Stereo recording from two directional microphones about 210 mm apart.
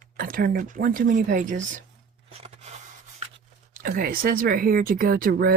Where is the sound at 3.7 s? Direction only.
40° right (ahead or behind).